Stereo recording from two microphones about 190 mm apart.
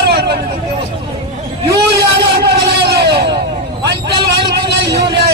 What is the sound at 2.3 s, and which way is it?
Vehicle, 60° right (ahead or behind).